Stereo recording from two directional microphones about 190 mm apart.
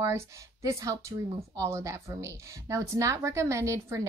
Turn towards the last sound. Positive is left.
turn(degrees=-15)  # may be behind; listen again after turning